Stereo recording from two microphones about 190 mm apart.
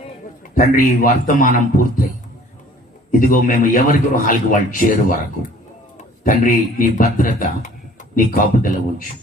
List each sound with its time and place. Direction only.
0.5 s a man's voice: 45° left (ahead or behind)
3.1 s a man's voice: 45° left (ahead or behind)
6.2 s a man's voice: 45° left (ahead or behind)